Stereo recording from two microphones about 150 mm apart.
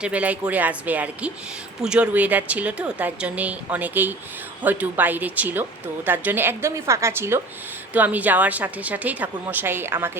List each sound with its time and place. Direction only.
0.0 s a woman's voice: 10° right (ahead or behind)